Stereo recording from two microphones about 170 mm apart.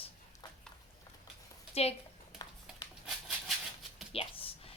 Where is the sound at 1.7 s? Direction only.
35° left (ahead or behind).